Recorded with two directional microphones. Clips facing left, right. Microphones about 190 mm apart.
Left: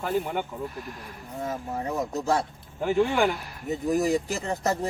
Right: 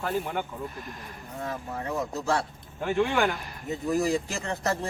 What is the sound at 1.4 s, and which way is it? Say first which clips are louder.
Speech: left 3 dB; 20° left (ahead or behind).